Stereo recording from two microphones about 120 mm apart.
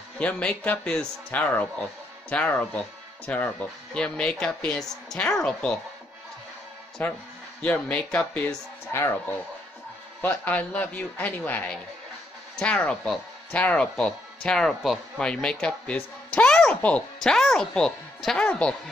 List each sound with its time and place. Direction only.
0.2 s speech: 10° left (ahead or behind)
7.0 s speech: 15° left (ahead or behind)
8.9 s speech: 25° left (ahead or behind)